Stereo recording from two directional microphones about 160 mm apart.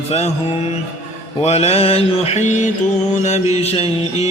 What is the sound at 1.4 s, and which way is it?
Mantra, 40° left (ahead or behind).